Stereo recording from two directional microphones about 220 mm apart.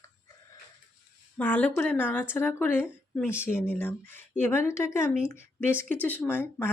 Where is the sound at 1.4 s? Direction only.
5° left (ahead or behind).